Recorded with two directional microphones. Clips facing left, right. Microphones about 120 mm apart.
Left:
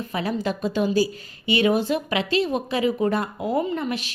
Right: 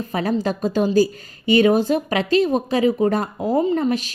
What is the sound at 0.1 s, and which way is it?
Speech, 40° right (ahead or behind).